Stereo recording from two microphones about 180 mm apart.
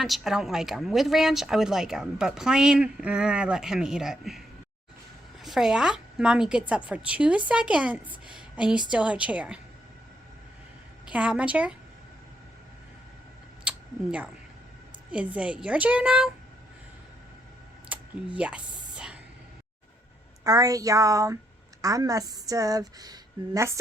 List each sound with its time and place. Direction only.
0.0 s a woman's voice: centre (ahead or behind)
11.0 s a woman's voice: 5° right (ahead or behind)
13.7 s a sound: 5° right (ahead or behind)
15.1 s a woman's voice: 5° right (ahead or behind)
17.8 s computer keyboard: 5° right (ahead or behind)
20.4 s a woman's voice: 20° right (ahead or behind)